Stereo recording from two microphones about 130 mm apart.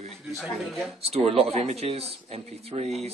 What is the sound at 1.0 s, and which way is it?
Speech, 50° right (ahead or behind).